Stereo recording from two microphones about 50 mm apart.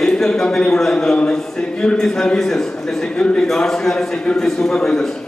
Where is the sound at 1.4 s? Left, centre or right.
Centre.